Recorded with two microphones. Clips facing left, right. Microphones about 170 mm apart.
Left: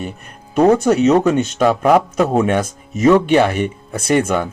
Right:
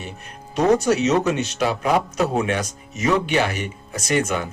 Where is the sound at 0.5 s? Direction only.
55° left (ahead or behind).